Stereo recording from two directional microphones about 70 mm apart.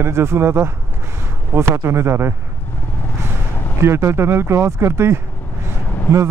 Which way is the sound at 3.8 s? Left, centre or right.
Right.